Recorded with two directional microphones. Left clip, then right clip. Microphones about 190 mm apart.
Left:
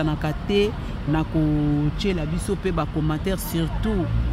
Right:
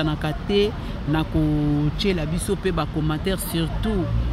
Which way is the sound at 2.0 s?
10° right (ahead or behind).